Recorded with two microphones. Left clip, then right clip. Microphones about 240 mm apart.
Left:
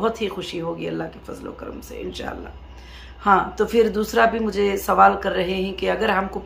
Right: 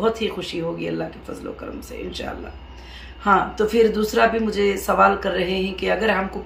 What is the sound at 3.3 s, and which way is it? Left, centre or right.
Speech, centre.